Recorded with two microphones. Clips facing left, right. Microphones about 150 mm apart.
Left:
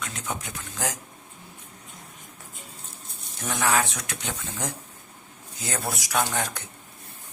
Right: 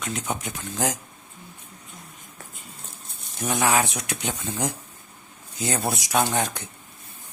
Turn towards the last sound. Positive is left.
turn(degrees=-20)  # may be behind; listen again after turning